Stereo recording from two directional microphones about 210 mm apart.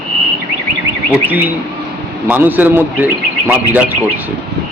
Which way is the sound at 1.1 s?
10° right (ahead or behind).